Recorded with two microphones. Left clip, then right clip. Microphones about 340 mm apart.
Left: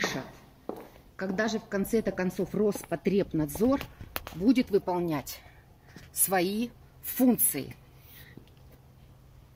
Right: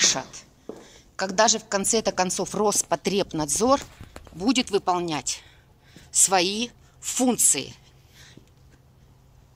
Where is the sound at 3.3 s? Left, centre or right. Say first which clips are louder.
Right 4 dB; right.